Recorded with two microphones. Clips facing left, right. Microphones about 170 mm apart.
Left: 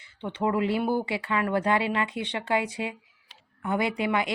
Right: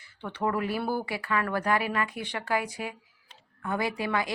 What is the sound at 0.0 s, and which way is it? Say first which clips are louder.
A woman's voice: left 2 dB; 20° left (ahead or behind).